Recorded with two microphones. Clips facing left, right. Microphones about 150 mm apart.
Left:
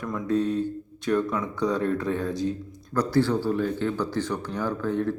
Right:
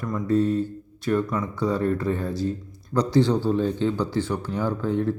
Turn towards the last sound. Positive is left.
turn(degrees=-15)  # may be behind; listen again after turning